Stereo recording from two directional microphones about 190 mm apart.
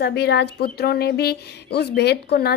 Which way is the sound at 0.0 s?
60° left (ahead or behind).